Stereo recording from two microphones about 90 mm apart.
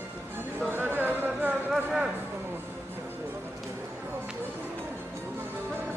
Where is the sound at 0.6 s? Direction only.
25° right (ahead or behind).